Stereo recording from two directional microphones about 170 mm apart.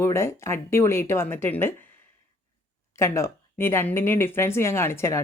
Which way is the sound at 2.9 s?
15° left (ahead or behind).